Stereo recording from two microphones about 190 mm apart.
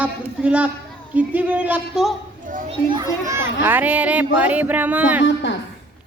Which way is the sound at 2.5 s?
45° right (ahead or behind).